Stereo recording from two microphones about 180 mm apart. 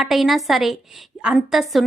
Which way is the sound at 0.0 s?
Centre (ahead or behind).